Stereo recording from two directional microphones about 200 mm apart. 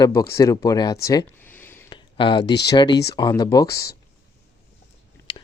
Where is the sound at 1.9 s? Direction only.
25° left (ahead or behind).